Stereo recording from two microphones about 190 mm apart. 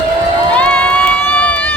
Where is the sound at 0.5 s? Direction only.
5° left (ahead or behind).